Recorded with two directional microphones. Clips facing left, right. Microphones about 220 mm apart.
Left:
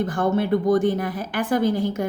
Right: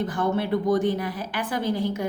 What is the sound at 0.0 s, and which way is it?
A woman's voice, 45° left (ahead or behind).